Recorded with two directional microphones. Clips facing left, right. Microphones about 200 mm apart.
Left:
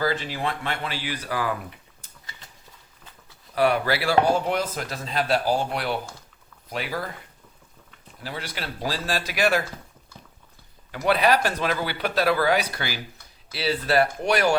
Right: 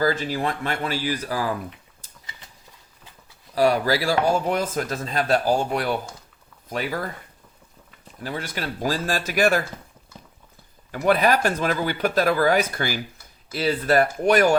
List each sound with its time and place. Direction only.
0.0 s speech: 45° right (ahead or behind)
3.5 s speech: 40° right (ahead or behind)
6.7 s speech: 45° right (ahead or behind)
8.2 s speech: 45° right (ahead or behind)
10.9 s speech: 45° right (ahead or behind)